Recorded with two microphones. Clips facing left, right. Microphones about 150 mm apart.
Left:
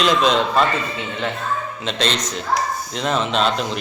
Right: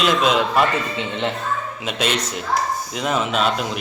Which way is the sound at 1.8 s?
10° right (ahead or behind).